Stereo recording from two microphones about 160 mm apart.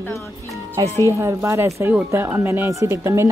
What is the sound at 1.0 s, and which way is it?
Speech, 20° right (ahead or behind).